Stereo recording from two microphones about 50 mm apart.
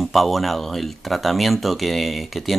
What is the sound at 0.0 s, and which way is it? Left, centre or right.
Speech, centre.